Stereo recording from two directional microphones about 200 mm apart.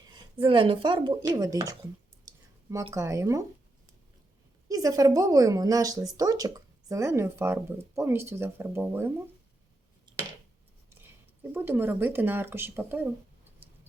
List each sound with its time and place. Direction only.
0.1 s speech: 25° right (ahead or behind)
2.2 s a sound: 15° right (ahead or behind)
2.9 s a woman's voice: 15° right (ahead or behind)
4.7 s a woman's voice: 15° right (ahead or behind)
10.1 s a sound: 20° right (ahead or behind)
11.5 s a woman's voice: 10° right (ahead or behind)